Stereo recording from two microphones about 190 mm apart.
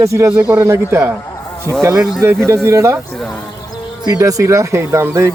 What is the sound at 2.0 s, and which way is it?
Speech, centre (ahead or behind).